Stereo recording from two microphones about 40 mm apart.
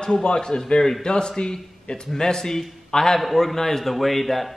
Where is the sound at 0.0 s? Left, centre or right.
Centre.